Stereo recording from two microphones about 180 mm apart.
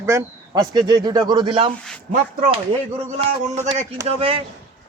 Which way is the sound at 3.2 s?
40° right (ahead or behind).